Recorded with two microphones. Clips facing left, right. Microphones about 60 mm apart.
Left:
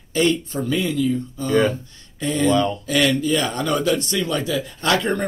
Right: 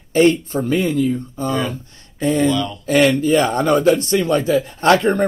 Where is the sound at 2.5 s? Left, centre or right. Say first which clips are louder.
Left 2 dB; left.